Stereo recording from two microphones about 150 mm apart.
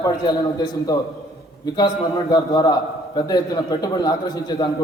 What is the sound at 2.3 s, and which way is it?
A man's voice, 25° left (ahead or behind).